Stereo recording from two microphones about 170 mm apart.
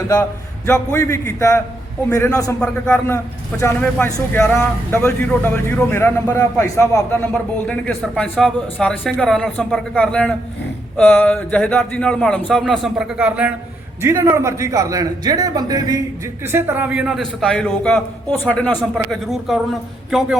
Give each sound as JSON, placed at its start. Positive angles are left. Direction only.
{"t": 0.1, "sound": "a man's voice", "side_deg": 15}